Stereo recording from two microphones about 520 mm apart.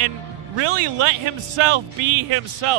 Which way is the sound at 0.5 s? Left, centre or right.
Right.